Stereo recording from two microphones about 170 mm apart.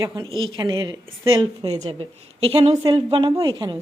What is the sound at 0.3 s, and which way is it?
A woman's voice, 25° right (ahead or behind).